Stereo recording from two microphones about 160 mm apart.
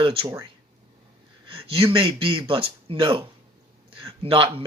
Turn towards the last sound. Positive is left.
turn(degrees=-35)  # may be behind; listen again after turning